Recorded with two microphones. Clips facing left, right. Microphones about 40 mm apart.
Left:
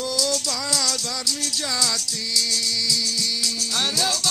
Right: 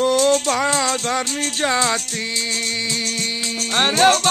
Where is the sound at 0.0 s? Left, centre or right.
Right.